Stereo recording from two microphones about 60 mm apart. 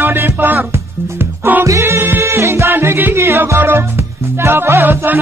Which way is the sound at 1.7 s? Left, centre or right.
Right.